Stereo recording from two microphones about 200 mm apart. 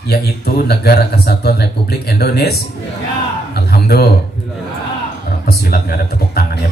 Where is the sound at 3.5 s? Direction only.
55° left (ahead or behind).